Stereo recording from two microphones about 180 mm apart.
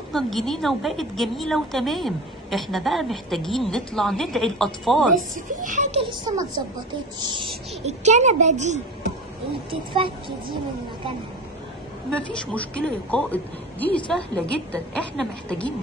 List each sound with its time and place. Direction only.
0.1 s a woman's voice: centre (ahead or behind)
5.6 s a child's voice: 45° right (ahead or behind); by 7.4 s 25° right (ahead or behind)
7.8 s a child's voice: 40° right (ahead or behind)
9.7 s a child's voice: 30° right (ahead or behind)
12.1 s a woman's voice: 5° left (ahead or behind)